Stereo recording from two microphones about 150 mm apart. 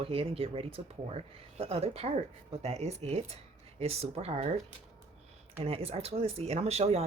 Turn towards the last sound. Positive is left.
turn(degrees=-45)  # may be behind; listen again after turning